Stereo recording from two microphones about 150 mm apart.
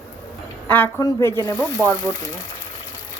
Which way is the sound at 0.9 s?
20° left (ahead or behind).